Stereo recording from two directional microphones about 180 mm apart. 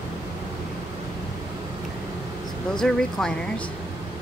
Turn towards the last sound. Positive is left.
turn(degrees=5)  # may be behind; listen again after turning